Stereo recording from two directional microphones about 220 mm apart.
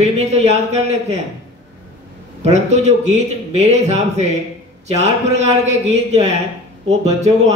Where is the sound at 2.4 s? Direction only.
30° right (ahead or behind).